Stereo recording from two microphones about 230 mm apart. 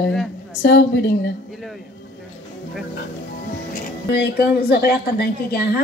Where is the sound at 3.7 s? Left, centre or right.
Left.